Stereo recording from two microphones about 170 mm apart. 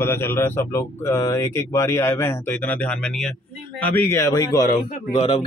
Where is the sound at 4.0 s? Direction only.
15° left (ahead or behind); by 5.4 s 30° left (ahead or behind).